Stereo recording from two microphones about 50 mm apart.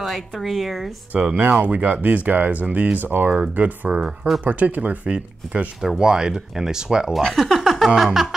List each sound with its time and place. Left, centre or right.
0.0 s speech: centre
1.1 s speech: right
5.8 s speech: centre
7.3 s music: centre
8.0 s speech: centre